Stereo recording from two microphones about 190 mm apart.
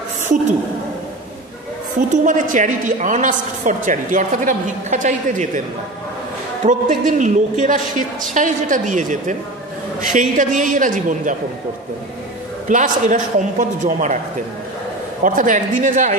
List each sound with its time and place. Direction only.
2.0 s a woman's voice: 45° right (ahead or behind)
6.6 s a woman's voice: 40° right (ahead or behind)
12.6 s a woman's voice: 45° right (ahead or behind)
15.2 s a woman's voice: 45° right (ahead or behind)